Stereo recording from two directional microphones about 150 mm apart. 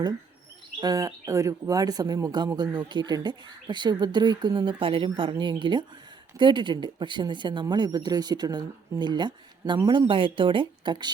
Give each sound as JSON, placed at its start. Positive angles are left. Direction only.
{"t": 0.8, "sound": "speech", "side_deg": -25}